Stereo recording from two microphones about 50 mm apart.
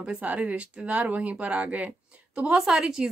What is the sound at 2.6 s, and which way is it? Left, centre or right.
Speech, centre.